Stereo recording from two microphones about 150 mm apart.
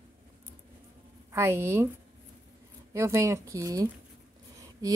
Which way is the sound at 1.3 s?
15° right (ahead or behind).